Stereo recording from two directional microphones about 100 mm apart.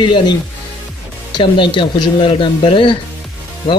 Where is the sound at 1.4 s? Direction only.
55° left (ahead or behind).